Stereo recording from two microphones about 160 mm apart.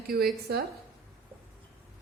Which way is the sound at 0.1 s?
75° right (ahead or behind).